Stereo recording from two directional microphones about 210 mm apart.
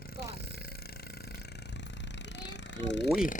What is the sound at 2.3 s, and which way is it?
Jackhammer, 55° left (ahead or behind).